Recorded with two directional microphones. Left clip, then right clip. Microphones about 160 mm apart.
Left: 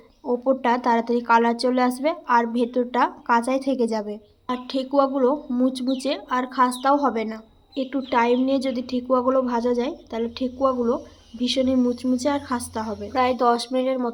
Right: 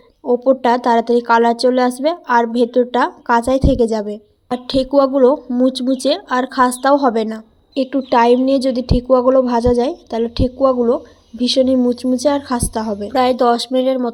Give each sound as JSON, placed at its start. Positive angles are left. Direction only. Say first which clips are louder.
{"t": 0.3, "sound": "a woman's voice", "louder": "right 8 dB", "side_deg": -25}